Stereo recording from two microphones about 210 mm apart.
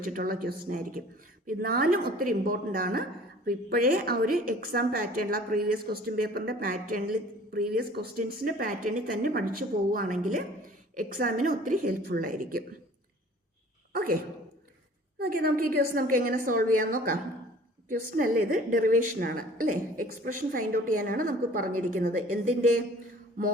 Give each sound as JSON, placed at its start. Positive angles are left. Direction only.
{"t": 0.0, "sound": "a woman's voice", "side_deg": -45}
{"t": 13.9, "sound": "a sound", "side_deg": -45}
{"t": 15.2, "sound": "a woman's voice", "side_deg": -45}